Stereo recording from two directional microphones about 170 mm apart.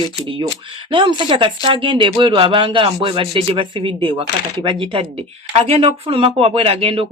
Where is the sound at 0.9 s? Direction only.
30° right (ahead or behind).